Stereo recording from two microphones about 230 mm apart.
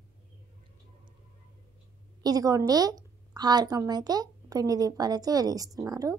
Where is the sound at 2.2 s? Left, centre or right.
Centre.